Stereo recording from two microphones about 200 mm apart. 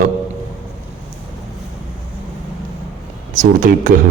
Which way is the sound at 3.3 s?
40° right (ahead or behind).